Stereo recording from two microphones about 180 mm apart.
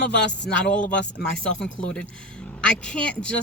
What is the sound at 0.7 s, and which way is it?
Speech, 5° left (ahead or behind).